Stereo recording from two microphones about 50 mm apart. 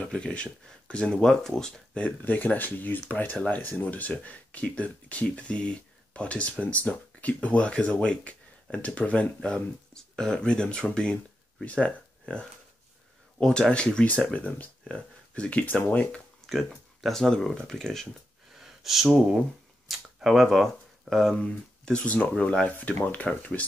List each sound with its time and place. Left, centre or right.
0.0 s speech: left
1.2 s speech: centre
1.5 s speech: left
14.0 s speech: left
16.4 s speech: centre
18.6 s gasp: centre
19.9 s a sound: centre
20.2 s speech: centre
22.0 s speech: left
22.7 s speech: left